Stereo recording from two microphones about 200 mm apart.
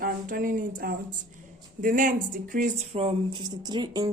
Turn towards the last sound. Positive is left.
turn(degrees=-20)  # may be behind; listen again after turning